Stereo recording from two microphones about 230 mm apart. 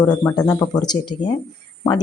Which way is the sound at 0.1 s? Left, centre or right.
Centre.